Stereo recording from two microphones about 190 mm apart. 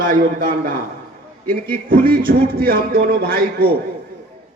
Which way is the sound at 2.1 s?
50° right (ahead or behind).